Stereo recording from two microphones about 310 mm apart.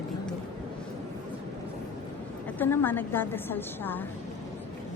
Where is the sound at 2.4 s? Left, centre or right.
Centre.